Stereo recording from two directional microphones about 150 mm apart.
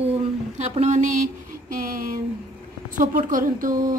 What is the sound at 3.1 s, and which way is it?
Speech, 65° right (ahead or behind).